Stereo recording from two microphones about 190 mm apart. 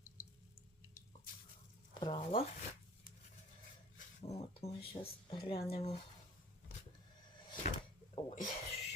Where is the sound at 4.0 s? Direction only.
35° left (ahead or behind).